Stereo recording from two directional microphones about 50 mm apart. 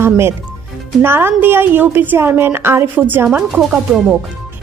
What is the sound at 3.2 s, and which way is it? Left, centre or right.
Speech, centre.